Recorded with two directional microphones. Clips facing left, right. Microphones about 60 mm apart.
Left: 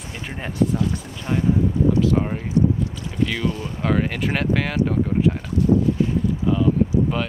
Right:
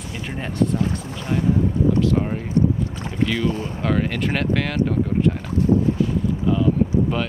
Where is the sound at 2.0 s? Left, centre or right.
Centre.